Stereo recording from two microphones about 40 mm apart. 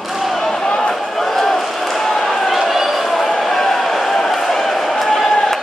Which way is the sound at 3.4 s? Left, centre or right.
Centre.